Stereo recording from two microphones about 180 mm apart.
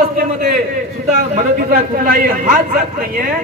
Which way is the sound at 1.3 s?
50° right (ahead or behind).